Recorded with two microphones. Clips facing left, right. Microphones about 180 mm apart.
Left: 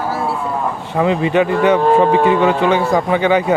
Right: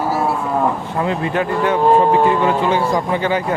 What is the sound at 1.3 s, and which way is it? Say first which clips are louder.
A man's voice: left 5 dB; 75° left (ahead or behind).